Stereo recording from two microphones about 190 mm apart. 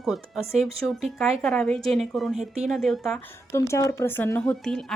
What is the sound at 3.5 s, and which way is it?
Speech, 15° left (ahead or behind).